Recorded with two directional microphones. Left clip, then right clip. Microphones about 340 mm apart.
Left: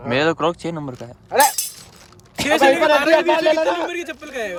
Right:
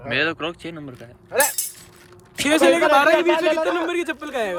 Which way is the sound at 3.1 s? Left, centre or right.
Left.